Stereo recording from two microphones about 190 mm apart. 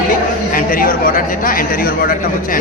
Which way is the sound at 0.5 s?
50° left (ahead or behind).